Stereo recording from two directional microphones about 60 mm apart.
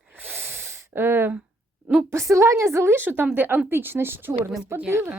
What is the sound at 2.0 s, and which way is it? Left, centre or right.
Speech, right.